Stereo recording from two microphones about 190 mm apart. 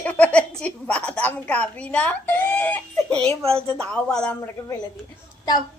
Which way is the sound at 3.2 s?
30° right (ahead or behind).